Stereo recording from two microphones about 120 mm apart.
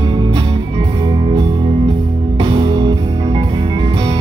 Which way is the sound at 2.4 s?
40° right (ahead or behind).